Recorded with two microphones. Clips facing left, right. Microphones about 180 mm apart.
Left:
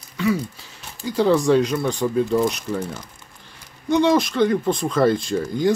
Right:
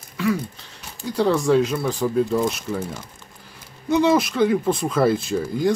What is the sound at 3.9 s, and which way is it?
Speech, 5° right (ahead or behind).